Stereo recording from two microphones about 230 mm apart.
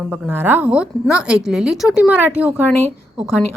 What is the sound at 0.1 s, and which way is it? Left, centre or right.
A woman's voice, centre.